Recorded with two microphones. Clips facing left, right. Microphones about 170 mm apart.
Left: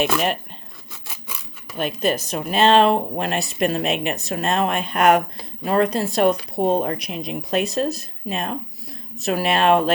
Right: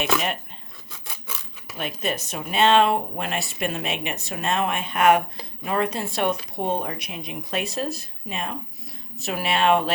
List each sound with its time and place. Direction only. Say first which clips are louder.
0.0 s speech: left 4 dB; centre (ahead or behind)
1.0 s filing: even; 5° left (ahead or behind)
2.0 s speech: left 6 dB; 35° left (ahead or behind)
9.6 s speech: left 2 dB; 35° left (ahead or behind)